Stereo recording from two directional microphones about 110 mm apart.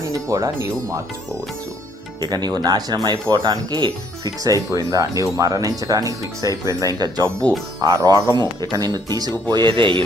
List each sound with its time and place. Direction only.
0.0 s speech: 30° right (ahead or behind)
2.2 s speech: 40° right (ahead or behind)
7.4 s speech: 40° right (ahead or behind)